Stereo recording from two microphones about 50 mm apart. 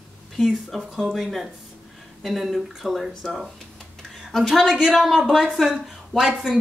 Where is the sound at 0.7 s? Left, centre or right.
Centre.